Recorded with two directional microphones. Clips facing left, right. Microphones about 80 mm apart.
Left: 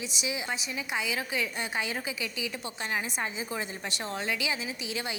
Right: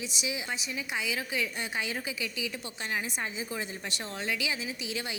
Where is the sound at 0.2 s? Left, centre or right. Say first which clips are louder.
Left 2 dB; left.